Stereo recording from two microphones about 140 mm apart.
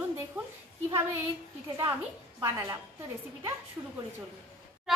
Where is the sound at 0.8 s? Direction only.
20° right (ahead or behind).